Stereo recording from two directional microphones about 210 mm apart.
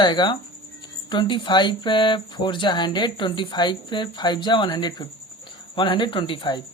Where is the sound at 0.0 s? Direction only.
20° left (ahead or behind).